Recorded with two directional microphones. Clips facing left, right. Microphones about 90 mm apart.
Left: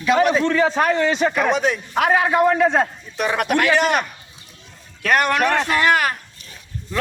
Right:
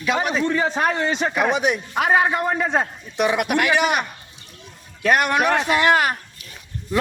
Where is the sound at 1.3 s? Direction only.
15° right (ahead or behind).